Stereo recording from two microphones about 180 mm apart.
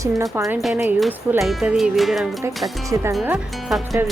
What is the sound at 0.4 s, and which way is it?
Speech, centre (ahead or behind).